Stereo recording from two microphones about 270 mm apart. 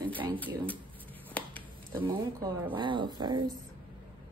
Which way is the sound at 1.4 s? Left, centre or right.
Centre.